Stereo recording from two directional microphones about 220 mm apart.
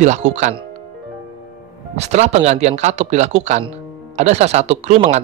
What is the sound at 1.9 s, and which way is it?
A man's voice, 30° right (ahead or behind).